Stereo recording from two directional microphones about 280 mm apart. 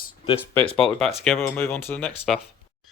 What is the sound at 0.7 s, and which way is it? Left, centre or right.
Speech, centre.